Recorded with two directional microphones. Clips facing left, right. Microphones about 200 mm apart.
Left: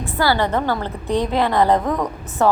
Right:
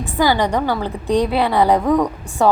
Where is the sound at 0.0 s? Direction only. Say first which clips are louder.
Right 2 dB; 15° right (ahead or behind).